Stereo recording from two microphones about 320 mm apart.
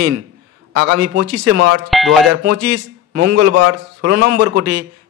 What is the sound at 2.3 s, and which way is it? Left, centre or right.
A man's voice, right.